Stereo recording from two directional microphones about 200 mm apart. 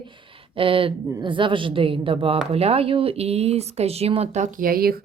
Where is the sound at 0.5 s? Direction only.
25° right (ahead or behind).